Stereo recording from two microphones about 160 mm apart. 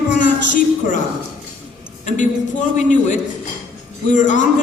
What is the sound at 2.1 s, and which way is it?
Speech, 50° left (ahead or behind).